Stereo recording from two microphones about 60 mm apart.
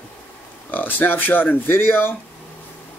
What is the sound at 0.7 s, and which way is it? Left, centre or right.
Speech, left.